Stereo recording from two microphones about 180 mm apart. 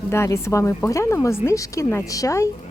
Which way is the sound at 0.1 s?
15° left (ahead or behind).